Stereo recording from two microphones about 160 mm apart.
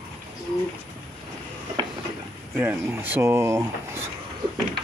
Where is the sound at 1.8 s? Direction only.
30° right (ahead or behind).